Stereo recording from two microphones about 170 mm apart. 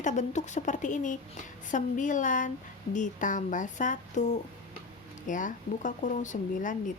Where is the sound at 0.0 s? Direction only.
45° left (ahead or behind).